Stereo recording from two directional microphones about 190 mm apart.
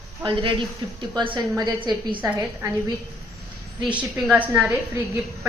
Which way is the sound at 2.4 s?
15° right (ahead or behind).